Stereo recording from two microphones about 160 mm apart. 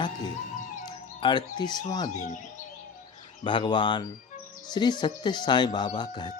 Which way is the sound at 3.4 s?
30° left (ahead or behind).